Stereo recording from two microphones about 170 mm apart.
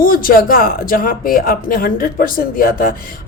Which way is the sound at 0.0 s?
55° left (ahead or behind).